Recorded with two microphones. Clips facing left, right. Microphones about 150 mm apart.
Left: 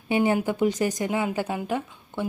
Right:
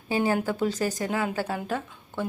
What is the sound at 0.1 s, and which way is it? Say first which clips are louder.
Speech: left 2 dB; 20° left (ahead or behind).